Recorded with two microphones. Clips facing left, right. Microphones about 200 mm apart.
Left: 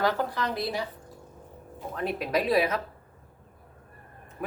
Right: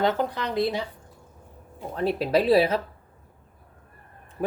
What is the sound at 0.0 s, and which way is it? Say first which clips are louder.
Speech: right 3 dB; 20° right (ahead or behind).